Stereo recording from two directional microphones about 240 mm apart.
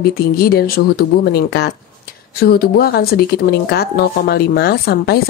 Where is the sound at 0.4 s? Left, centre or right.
Left.